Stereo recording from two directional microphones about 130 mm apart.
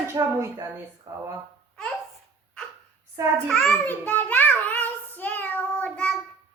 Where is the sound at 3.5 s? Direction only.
15° left (ahead or behind).